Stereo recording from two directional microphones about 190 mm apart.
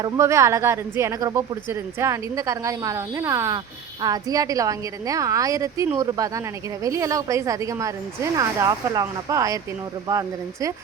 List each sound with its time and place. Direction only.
0.0 s a woman's voice: 15° right (ahead or behind)